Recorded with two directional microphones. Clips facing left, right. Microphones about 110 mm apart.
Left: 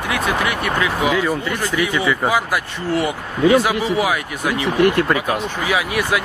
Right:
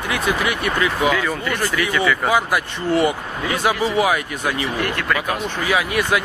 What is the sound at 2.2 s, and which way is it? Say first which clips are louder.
Speech: even; centre (ahead or behind).